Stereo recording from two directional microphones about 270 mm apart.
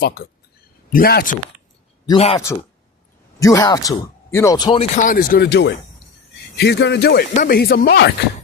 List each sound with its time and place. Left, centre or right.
0.0 s speech: left
2.0 s speech: left
3.4 s speech: centre; by 8.1 s left